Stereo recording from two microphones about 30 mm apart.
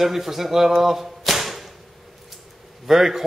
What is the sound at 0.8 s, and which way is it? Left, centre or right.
Whip, centre.